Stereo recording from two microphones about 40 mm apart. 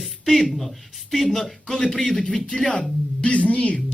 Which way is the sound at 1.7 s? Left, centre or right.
Centre.